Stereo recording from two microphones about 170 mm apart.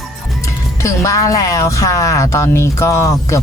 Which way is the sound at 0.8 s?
20° left (ahead or behind).